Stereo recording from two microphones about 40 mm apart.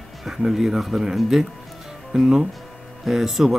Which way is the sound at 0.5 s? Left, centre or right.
Centre.